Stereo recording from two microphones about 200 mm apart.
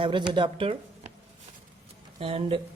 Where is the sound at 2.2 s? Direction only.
30° right (ahead or behind).